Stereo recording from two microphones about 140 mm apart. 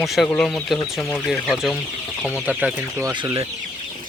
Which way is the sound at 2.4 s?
10° right (ahead or behind).